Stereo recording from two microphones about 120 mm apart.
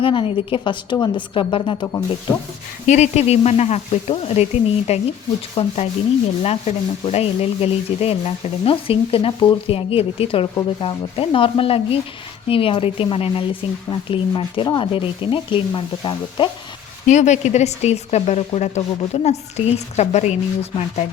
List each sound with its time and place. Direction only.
0.0 s speech: 45° left (ahead or behind)
2.8 s speech: 70° left (ahead or behind); by 16.5 s 45° left (ahead or behind)
17.1 s speech: 80° left; by 21.0 s 60° left (ahead or behind)